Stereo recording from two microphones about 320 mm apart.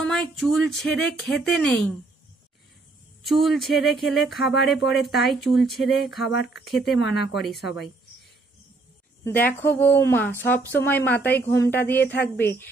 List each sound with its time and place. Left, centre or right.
0.0 s speech: centre
3.3 s speech: centre
7.0 s speech: left
7.3 s speech: centre
9.2 s speech: centre